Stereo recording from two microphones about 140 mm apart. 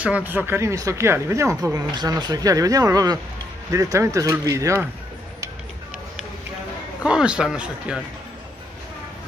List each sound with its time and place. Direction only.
0.0 s speech: 10° right (ahead or behind)
7.0 s speech: 5° right (ahead or behind)